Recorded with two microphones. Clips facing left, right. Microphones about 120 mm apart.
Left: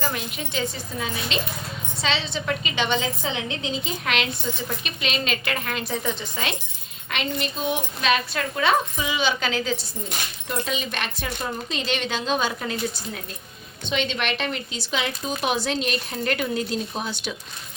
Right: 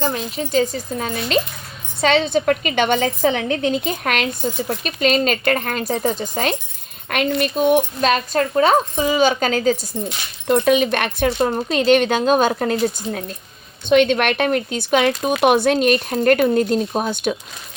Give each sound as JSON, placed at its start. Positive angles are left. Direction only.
{"t": 0.0, "sound": "speech", "side_deg": -35}
{"t": 7.1, "sound": "speech", "side_deg": -55}
{"t": 10.4, "sound": "speech", "side_deg": -60}